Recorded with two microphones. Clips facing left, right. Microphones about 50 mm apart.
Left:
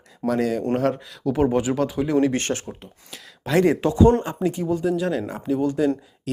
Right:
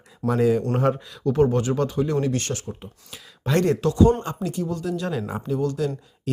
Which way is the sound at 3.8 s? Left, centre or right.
Left.